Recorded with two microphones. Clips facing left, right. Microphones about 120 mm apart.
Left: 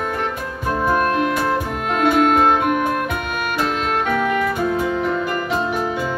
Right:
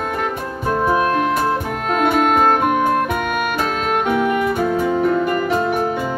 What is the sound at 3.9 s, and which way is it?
Music, 15° right (ahead or behind).